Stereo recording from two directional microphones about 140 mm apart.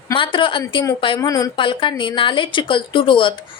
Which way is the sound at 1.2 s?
25° left (ahead or behind).